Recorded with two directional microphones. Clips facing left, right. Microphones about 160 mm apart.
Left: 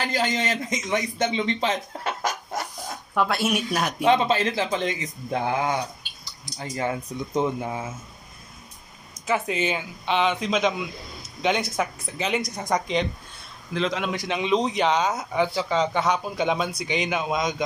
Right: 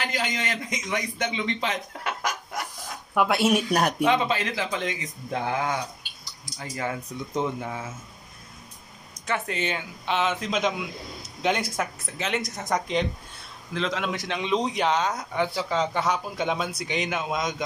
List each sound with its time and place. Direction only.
0.0 s a man's voice: 30° left (ahead or behind)
3.2 s speech: 20° right (ahead or behind)
3.5 s speech: 40° right (ahead or behind)
4.0 s speech: 30° left (ahead or behind)
7.3 s speech: 15° left (ahead or behind)
9.2 s speech: 5° left (ahead or behind)